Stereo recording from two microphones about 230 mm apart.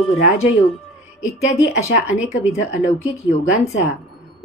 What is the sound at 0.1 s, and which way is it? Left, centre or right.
Speech, left.